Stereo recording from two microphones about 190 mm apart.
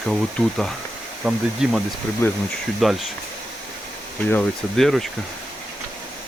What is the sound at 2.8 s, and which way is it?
Speech, centre (ahead or behind).